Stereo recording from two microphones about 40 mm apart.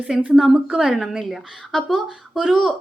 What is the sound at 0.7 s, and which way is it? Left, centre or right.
Speech, centre.